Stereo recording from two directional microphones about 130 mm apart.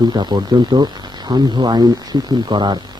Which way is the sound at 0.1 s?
35° right (ahead or behind).